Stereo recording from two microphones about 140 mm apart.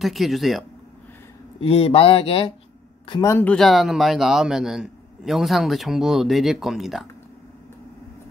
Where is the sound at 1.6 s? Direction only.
45° left (ahead or behind).